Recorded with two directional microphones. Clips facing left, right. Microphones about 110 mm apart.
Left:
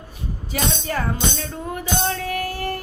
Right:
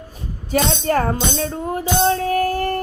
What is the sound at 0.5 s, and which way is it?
Music, 45° right (ahead or behind).